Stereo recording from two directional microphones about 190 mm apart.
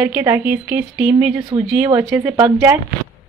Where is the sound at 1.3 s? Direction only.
25° right (ahead or behind).